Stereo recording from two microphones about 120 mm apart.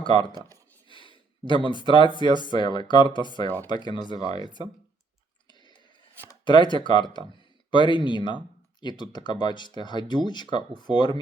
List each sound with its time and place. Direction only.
0.0 s speech: 45° left (ahead or behind)
0.3 s a sound: 30° right (ahead or behind)
0.9 s speech: 45° left (ahead or behind)
6.4 s speech: 40° left (ahead or behind)